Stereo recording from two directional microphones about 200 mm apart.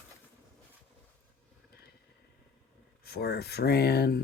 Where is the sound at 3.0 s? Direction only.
50° left (ahead or behind).